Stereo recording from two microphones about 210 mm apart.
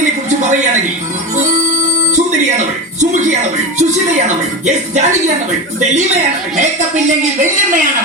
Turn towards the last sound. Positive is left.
turn(degrees=-40)  # may be behind; listen again after turning